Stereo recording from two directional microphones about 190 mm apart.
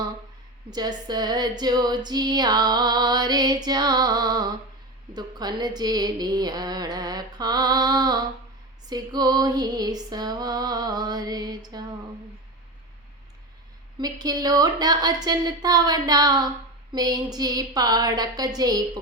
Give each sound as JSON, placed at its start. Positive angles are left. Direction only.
{"t": 0.7, "sound": "speech", "side_deg": -20}
{"t": 14.0, "sound": "speech", "side_deg": -20}